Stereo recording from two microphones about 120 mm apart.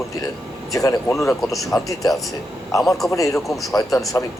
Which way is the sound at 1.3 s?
Centre (ahead or behind).